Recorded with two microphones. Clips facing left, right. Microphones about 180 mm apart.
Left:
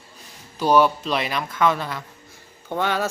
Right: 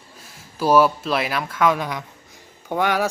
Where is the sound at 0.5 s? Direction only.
5° right (ahead or behind).